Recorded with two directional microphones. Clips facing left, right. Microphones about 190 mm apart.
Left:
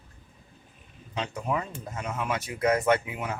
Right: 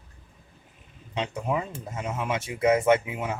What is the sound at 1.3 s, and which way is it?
Speech, 25° right (ahead or behind).